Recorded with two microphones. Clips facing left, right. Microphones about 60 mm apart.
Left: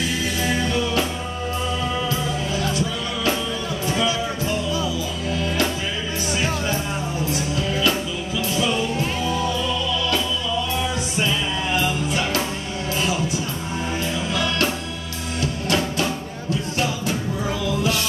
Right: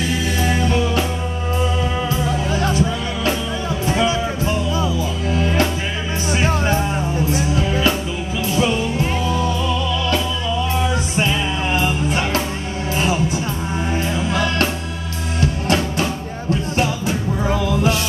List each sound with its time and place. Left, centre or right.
2.0 s music: right
3.8 s music: right
11.1 s music: right
14.3 s music: right
17.5 s music: right